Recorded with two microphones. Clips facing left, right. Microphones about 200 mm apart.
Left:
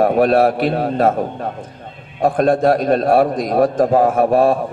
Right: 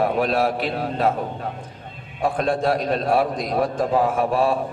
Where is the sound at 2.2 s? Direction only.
45° left (ahead or behind).